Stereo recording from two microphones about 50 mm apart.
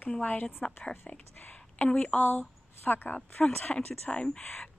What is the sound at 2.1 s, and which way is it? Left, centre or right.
Speech, left.